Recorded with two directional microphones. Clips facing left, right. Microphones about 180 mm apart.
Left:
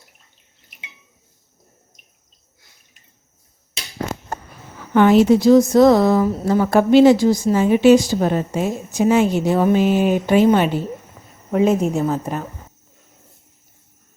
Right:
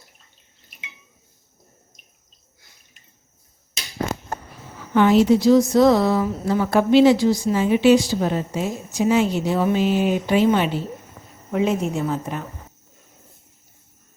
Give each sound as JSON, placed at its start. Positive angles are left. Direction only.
{"t": 4.9, "sound": "a woman's voice", "side_deg": 55}